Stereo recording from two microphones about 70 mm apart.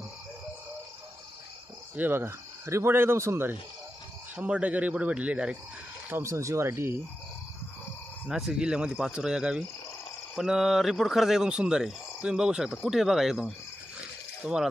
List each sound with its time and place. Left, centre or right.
2.0 s speech: right
4.4 s speech: centre
6.2 s speech: right
8.3 s speech: centre